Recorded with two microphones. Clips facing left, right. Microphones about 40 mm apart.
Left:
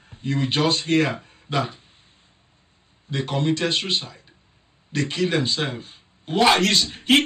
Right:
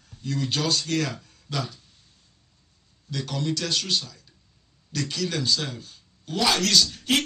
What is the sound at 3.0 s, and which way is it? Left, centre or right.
A man's voice, left.